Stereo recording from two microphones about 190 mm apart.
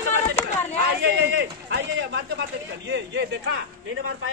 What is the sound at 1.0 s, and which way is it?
A man's voice, 65° right (ahead or behind).